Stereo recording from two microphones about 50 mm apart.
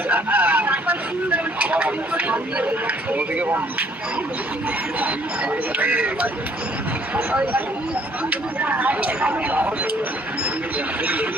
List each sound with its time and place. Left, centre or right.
0.1 s speech: right
5.8 s speech: right
8.3 s speech: right
11.0 s speech: right